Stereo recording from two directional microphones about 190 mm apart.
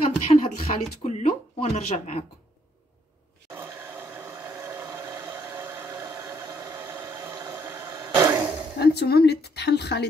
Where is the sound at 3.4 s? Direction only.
10° right (ahead or behind).